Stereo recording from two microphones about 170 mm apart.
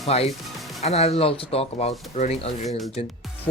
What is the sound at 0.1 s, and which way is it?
Speech, 35° left (ahead or behind).